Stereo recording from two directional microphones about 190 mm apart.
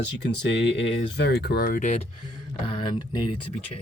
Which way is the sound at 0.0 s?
70° left (ahead or behind).